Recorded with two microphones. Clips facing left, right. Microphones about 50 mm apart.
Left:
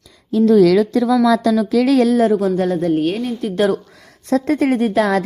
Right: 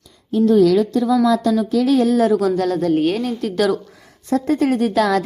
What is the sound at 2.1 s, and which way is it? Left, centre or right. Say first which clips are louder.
Speech: left 1 dB; left.